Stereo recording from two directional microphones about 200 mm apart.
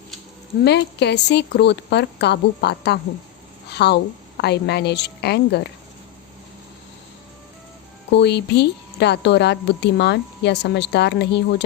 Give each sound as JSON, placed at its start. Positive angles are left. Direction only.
{"t": 0.6, "sound": "a woman's voice", "side_deg": 55}
{"t": 8.1, "sound": "a woman's voice", "side_deg": 60}